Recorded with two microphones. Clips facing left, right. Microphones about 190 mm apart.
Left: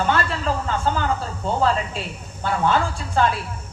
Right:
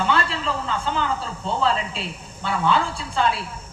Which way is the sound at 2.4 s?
45° left (ahead or behind).